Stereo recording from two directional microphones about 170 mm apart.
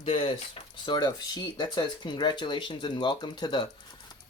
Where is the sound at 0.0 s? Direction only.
35° left (ahead or behind).